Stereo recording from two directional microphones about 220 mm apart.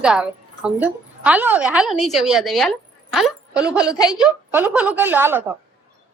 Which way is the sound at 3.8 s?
15° left (ahead or behind).